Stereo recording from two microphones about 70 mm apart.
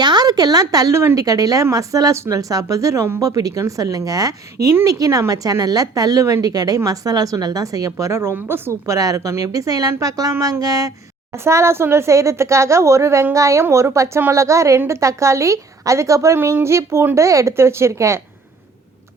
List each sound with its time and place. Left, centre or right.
0.0 s a woman's voice: right
3.2 s a woman's voice: right
8.9 s a woman's voice: right
11.4 s a woman's voice: right